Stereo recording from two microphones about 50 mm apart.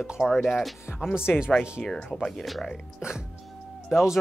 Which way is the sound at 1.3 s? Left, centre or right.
Centre.